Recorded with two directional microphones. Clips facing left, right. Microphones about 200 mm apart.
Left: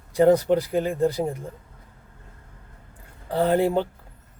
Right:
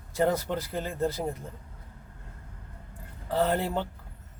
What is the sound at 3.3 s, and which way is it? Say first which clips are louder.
Speech: left 6 dB; 15° left (ahead or behind).